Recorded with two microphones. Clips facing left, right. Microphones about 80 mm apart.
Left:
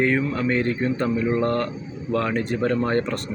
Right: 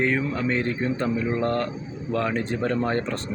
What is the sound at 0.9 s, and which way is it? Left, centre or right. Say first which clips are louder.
Speech: left 3 dB; centre.